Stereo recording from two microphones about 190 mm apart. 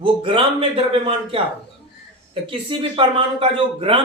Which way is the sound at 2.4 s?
25° right (ahead or behind).